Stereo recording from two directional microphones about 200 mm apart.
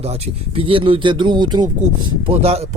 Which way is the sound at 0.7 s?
25° right (ahead or behind).